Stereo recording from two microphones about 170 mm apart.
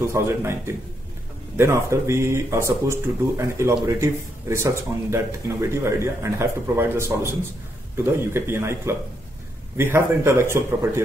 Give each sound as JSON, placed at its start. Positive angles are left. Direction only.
{"t": 0.1, "sound": "speech", "side_deg": -15}
{"t": 1.6, "sound": "speech", "side_deg": -15}